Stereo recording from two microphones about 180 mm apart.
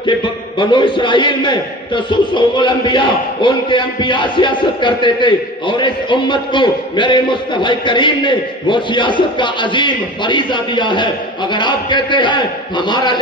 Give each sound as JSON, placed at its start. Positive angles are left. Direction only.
{"t": 0.0, "sound": "a man's voice", "side_deg": 25}